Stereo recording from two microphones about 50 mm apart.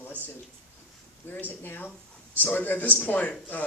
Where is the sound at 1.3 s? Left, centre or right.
Left.